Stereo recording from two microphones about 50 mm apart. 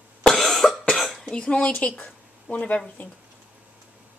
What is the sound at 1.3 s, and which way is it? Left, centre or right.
A woman's voice, left.